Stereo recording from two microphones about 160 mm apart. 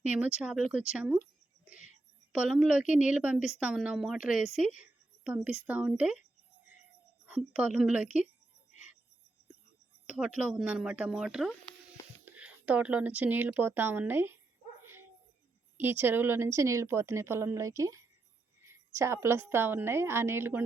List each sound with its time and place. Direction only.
0.0 s a woman's voice: 10° right (ahead or behind)
2.3 s a woman's voice: 5° right (ahead or behind)
7.3 s a woman's voice: 5° right (ahead or behind)
8.7 s cricket: 50° left (ahead or behind)
10.1 s a woman's voice: 10° right (ahead or behind)
14.8 s dog: 15° right (ahead or behind)
15.8 s a woman's voice: 15° right (ahead or behind)